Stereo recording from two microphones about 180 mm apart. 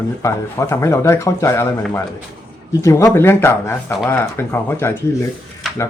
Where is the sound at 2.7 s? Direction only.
15° left (ahead or behind).